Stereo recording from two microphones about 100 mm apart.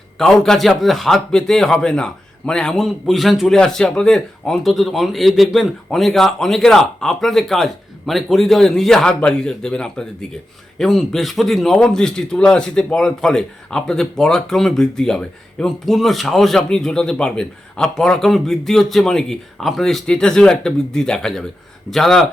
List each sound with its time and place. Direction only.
0.2 s a man's voice: 5° left (ahead or behind)